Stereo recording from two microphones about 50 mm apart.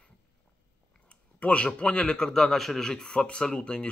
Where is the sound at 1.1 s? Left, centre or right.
Left.